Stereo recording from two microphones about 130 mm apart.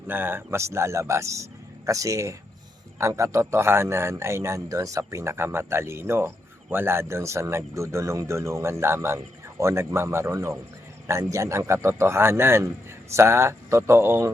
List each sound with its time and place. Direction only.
0.1 s a man's voice: 15° right (ahead or behind)